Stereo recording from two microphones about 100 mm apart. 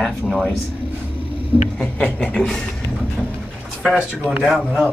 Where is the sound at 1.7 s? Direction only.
10° left (ahead or behind).